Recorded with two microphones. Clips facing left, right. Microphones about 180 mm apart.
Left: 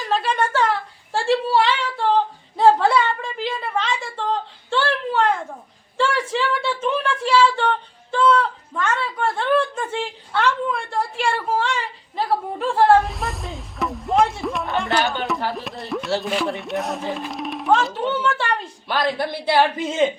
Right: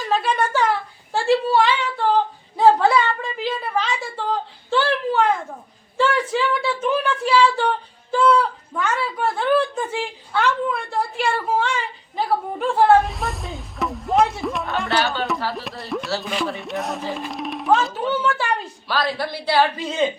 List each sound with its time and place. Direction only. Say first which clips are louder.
0.3 s speech: even; 5° right (ahead or behind)
6.3 s speech: right 1 dB; 5° right (ahead or behind)
14.8 s speech: right 1 dB; 20° left (ahead or behind)
15.5 s speech: even; centre (ahead or behind)
18.9 s speech: left 1 dB; 20° left (ahead or behind)